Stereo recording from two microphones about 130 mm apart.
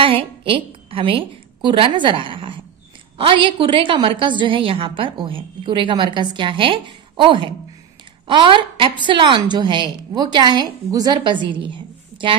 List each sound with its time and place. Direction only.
0.0 s a woman's voice: 45° right (ahead or behind)